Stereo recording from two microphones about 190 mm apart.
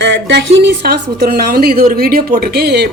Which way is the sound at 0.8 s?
55° right (ahead or behind).